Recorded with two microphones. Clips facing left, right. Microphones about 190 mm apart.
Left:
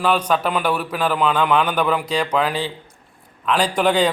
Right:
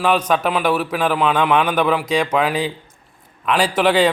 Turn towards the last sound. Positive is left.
turn(degrees=-5)  # may be behind; listen again after turning